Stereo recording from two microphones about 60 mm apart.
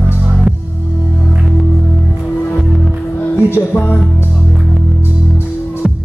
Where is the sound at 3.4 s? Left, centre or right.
Left.